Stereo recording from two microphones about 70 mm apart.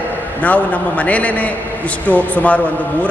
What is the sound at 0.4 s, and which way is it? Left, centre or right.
A man's voice, left.